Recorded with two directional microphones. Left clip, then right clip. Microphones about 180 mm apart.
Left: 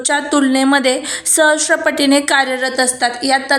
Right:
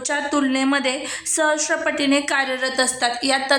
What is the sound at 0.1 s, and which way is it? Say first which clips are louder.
A woman's voice: left 6 dB; 25° left (ahead or behind).